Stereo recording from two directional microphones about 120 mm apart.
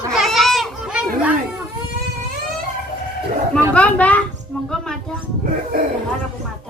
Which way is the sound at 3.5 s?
10° left (ahead or behind).